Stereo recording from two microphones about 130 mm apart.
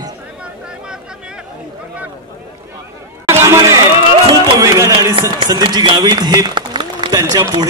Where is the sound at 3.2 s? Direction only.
20° right (ahead or behind).